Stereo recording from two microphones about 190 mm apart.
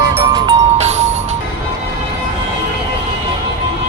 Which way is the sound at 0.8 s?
35° right (ahead or behind).